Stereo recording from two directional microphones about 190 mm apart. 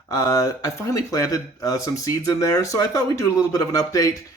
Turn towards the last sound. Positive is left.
turn(degrees=15)  # may be behind; listen again after turning